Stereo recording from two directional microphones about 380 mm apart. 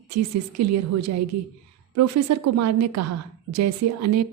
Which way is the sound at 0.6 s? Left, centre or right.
Right.